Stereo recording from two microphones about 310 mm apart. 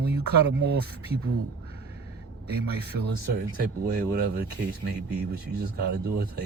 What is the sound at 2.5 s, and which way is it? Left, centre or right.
Speech, right.